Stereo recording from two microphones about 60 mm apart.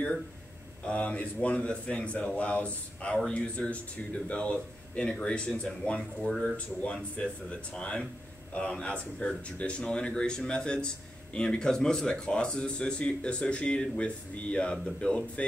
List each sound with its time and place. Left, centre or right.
0.8 s a man's voice: left
6.5 s a man's voice: left